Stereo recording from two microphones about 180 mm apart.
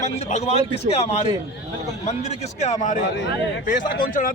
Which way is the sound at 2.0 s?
35° left (ahead or behind).